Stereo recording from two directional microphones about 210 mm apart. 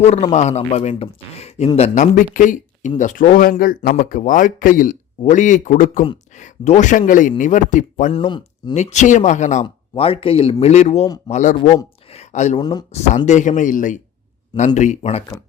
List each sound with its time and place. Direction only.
0.0 s speech: 30° left (ahead or behind)
8.1 s speech: 25° left (ahead or behind)
12.0 s a sound: 30° left (ahead or behind)
12.9 s speech: 30° left (ahead or behind)